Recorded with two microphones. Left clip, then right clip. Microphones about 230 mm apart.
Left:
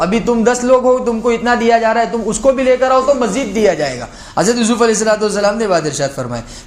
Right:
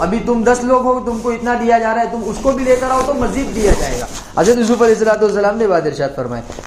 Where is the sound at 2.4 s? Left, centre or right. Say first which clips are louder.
Left 3 dB; left.